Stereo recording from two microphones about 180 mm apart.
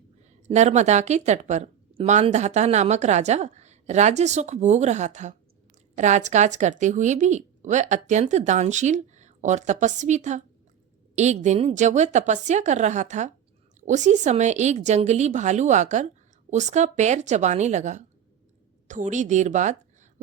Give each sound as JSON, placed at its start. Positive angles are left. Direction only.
{"t": 0.4, "sound": "speech", "side_deg": -40}